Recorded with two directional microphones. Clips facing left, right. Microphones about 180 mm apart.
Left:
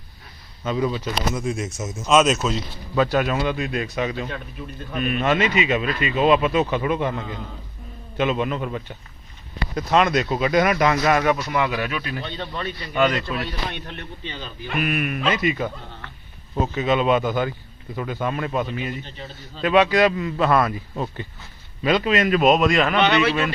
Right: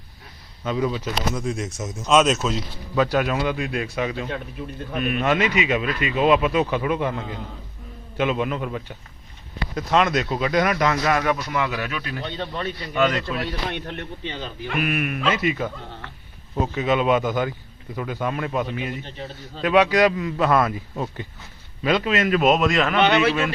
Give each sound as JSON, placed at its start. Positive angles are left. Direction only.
{"t": 0.6, "sound": "speech", "side_deg": 0}
{"t": 1.3, "sound": "a man's voice", "side_deg": 5}
{"t": 11.0, "sound": "speech", "side_deg": 25}
{"t": 12.2, "sound": "speech", "side_deg": -35}
{"t": 13.7, "sound": "speech", "side_deg": -65}
{"t": 14.8, "sound": "a man's voice", "side_deg": -5}
{"t": 23.0, "sound": "speech", "side_deg": -50}